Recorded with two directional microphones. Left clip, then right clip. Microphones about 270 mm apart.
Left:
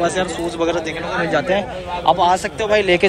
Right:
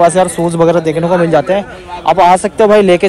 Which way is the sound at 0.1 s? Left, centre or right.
Centre.